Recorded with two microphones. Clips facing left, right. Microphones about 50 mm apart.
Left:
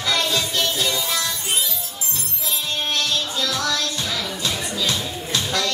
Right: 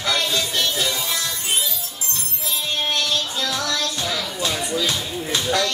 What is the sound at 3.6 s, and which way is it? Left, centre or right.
Music, centre.